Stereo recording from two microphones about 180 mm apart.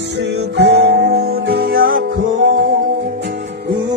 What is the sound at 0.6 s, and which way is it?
Music, 70° right (ahead or behind).